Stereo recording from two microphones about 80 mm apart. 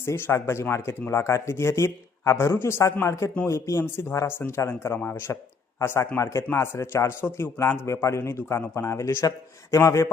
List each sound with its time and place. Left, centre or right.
0.0 s speech: left